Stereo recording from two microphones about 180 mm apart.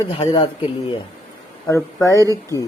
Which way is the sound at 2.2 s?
20° right (ahead or behind).